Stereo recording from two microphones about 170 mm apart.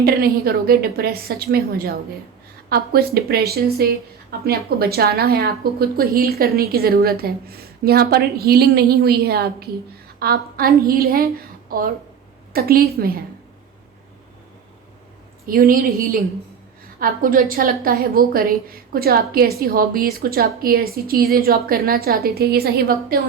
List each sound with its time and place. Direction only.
0.0 s speech: 65° right (ahead or behind)
15.4 s speech: 60° right (ahead or behind)